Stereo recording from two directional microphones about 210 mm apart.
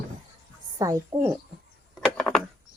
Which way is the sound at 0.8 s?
15° right (ahead or behind).